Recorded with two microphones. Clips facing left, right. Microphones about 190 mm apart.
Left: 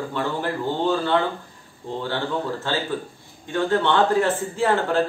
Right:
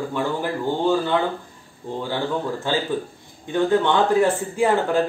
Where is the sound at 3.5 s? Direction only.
15° right (ahead or behind).